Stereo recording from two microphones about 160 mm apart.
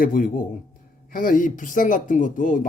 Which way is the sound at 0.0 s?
60° left (ahead or behind).